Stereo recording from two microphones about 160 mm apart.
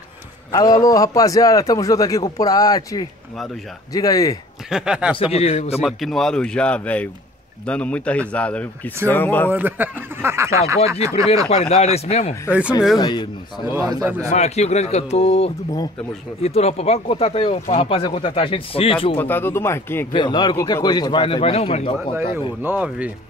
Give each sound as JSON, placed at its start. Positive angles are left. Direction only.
{"t": 0.5, "sound": "a man's voice", "side_deg": 25}
{"t": 4.6, "sound": "speech", "side_deg": -5}
{"t": 5.1, "sound": "speech", "side_deg": 35}
{"t": 5.9, "sound": "speech", "side_deg": 0}
{"t": 9.5, "sound": "speech", "side_deg": -10}
{"t": 11.4, "sound": "speech", "side_deg": 40}
{"t": 12.4, "sound": "speech", "side_deg": -10}
{"t": 13.0, "sound": "a man's voice", "side_deg": 25}
{"t": 13.7, "sound": "a man's voice", "side_deg": -25}
{"t": 14.3, "sound": "speech", "side_deg": 45}
{"t": 19.1, "sound": "speech", "side_deg": 15}
{"t": 20.1, "sound": "a man's voice", "side_deg": 30}
{"t": 22.6, "sound": "speech", "side_deg": -10}